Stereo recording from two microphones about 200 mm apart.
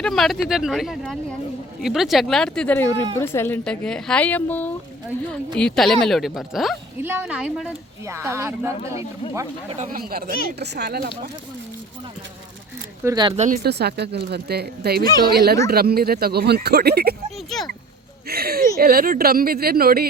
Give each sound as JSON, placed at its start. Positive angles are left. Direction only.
{"t": 0.0, "sound": "speech", "side_deg": 0}
{"t": 8.0, "sound": "speech", "side_deg": -15}
{"t": 9.6, "sound": "speech", "side_deg": -40}
{"t": 13.1, "sound": "speech", "side_deg": -20}
{"t": 13.3, "sound": "speech", "side_deg": -35}
{"t": 13.6, "sound": "speech", "side_deg": -55}
{"t": 18.3, "sound": "speech", "side_deg": -50}